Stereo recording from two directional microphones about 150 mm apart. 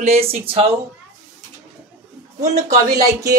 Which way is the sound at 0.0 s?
45° right (ahead or behind).